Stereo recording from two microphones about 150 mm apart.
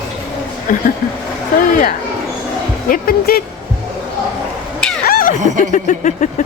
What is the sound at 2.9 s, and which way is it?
Speech, 75° left (ahead or behind).